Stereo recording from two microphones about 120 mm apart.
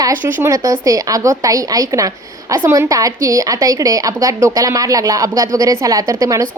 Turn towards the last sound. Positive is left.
turn(degrees=-30)  # may be behind; listen again after turning